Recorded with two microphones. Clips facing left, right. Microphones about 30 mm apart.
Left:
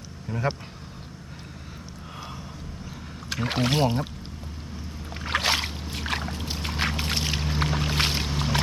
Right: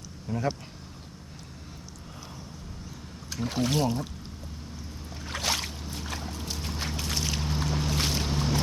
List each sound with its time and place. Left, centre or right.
0.3 s speech: left
3.2 s speech: left
5.2 s boat: left
5.9 s boat: left
6.9 s boat: left